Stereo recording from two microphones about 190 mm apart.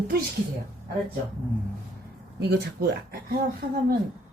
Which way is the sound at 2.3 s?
60° right (ahead or behind).